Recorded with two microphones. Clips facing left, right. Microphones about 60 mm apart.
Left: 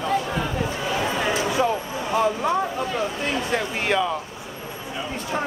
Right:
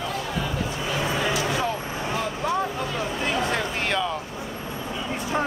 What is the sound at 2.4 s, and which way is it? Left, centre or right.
Speech, centre.